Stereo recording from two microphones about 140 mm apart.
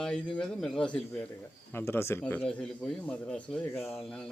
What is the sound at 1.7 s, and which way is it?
Speech, 15° left (ahead or behind).